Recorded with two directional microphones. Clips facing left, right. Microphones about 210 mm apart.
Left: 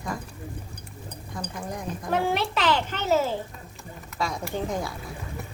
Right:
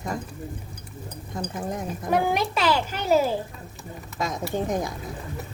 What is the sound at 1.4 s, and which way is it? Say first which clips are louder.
Speech: right 4 dB; 25° right (ahead or behind).